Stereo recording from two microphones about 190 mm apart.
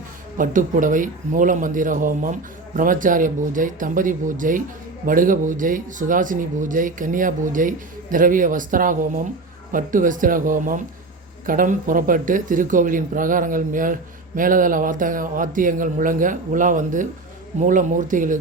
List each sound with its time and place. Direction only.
0.3 s a man's voice: 45° right (ahead or behind)